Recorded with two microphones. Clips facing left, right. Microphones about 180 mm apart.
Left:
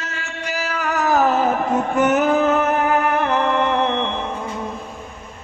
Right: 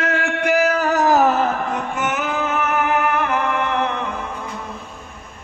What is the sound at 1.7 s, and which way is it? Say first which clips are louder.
Music: left 6 dB; 40° left (ahead or behind).